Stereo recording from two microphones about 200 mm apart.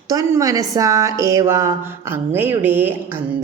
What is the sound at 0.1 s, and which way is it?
Speech, 15° right (ahead or behind).